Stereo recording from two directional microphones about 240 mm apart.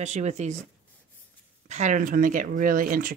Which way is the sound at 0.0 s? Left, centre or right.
Right.